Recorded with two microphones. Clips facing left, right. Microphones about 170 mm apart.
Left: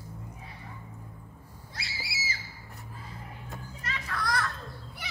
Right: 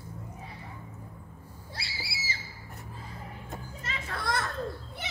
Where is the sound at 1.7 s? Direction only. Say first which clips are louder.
Even; 30° right (ahead or behind).